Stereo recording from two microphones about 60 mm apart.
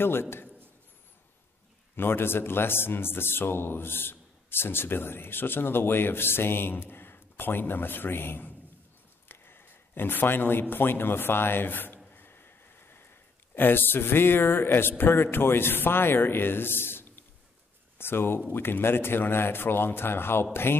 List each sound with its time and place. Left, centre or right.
0.0 s a man's voice: left
2.0 s a man's voice: left
12.1 s a sound: left
13.6 s a man's voice: left